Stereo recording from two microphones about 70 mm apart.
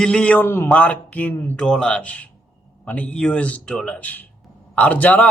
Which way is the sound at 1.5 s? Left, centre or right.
Centre.